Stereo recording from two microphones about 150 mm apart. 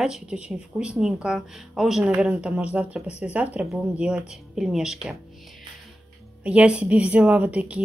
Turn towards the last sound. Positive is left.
turn(degrees=-10)  # may be behind; listen again after turning